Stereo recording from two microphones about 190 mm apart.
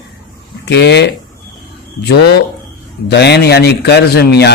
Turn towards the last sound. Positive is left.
turn(degrees=60)  # may be behind; listen again after turning